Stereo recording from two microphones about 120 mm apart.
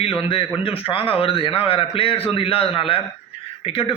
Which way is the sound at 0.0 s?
50° left (ahead or behind).